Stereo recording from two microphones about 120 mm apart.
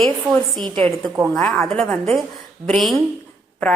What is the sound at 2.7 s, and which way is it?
Speech, centre (ahead or behind).